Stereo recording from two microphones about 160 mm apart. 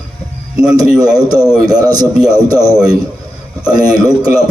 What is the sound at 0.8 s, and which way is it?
A man's voice, 25° right (ahead or behind).